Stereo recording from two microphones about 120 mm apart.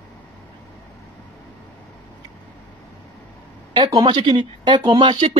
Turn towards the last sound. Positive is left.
turn(degrees=-40)  # may be behind; listen again after turning